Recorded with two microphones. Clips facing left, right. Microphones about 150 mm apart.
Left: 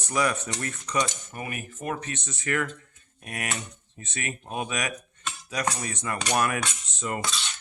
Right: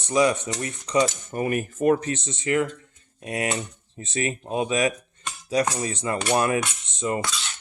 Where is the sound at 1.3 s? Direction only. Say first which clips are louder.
Right 11 dB; 40° right (ahead or behind).